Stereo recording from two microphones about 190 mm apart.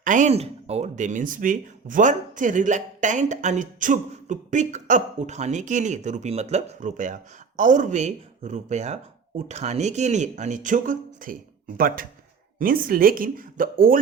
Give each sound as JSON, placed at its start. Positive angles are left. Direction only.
{"t": 0.0, "sound": "speech", "side_deg": -40}